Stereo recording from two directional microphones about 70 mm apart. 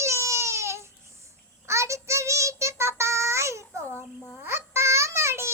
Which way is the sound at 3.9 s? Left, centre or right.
Left.